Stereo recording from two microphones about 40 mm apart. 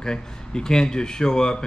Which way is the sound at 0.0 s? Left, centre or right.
Centre.